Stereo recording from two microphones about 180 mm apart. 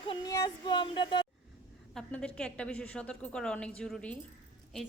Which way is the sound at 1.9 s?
5° left (ahead or behind).